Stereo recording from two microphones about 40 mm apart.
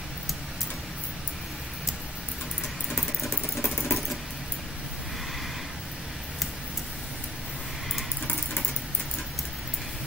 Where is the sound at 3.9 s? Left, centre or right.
Left.